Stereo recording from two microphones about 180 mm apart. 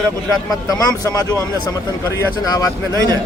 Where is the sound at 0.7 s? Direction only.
20° left (ahead or behind).